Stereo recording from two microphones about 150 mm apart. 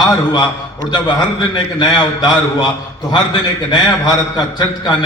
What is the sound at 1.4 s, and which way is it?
Speech, 30° left (ahead or behind).